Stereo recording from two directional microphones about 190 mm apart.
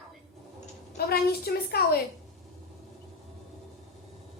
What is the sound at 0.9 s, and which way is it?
A woman's voice, 55° left (ahead or behind).